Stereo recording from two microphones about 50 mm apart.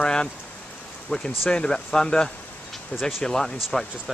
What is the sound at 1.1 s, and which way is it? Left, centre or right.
Speech, left.